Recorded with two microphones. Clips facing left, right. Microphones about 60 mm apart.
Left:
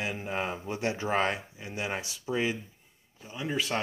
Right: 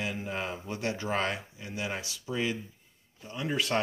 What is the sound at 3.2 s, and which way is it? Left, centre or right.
Speech, centre.